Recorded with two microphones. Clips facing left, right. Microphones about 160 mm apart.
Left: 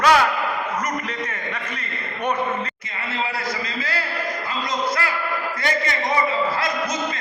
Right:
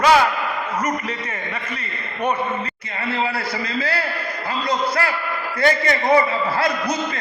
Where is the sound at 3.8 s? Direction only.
30° right (ahead or behind).